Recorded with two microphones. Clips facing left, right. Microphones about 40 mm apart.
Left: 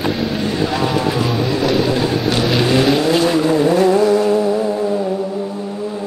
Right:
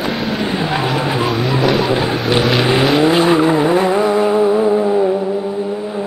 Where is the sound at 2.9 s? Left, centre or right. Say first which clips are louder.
Right 3 dB; right.